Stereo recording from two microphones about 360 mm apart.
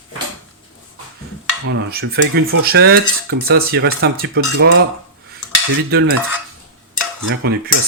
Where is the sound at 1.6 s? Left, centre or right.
Right.